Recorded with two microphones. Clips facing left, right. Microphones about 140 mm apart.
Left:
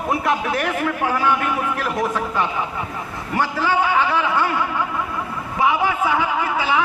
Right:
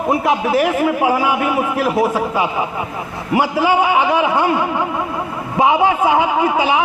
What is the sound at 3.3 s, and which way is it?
A man's voice, 15° right (ahead or behind).